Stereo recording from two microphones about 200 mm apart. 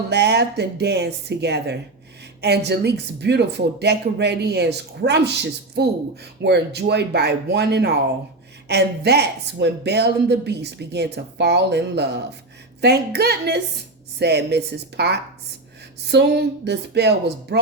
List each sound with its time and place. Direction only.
0.1 s speech: 60° right (ahead or behind)